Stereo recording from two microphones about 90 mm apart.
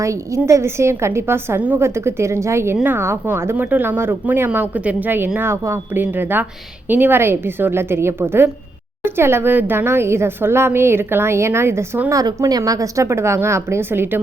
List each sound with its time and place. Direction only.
0.0 s a woman's voice: 35° right (ahead or behind)
12.1 s a woman's voice: 40° right (ahead or behind); by 14.2 s 25° right (ahead or behind)